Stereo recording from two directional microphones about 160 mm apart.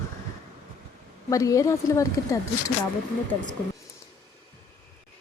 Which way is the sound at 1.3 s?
20° left (ahead or behind).